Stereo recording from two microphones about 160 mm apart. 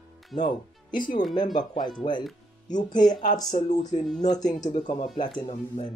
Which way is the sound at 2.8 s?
25° left (ahead or behind).